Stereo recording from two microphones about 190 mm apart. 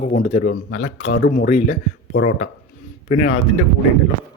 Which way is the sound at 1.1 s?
65° left (ahead or behind).